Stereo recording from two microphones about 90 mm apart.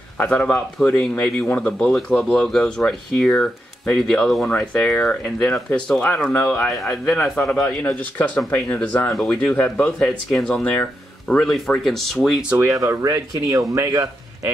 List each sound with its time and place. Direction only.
0.2 s speech: 15° left (ahead or behind)
12.6 s speech: 35° right (ahead or behind)